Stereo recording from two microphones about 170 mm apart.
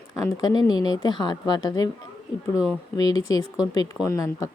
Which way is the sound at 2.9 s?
20° left (ahead or behind).